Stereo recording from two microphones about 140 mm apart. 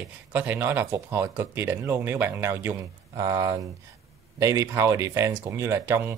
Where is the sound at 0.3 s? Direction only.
15° right (ahead or behind).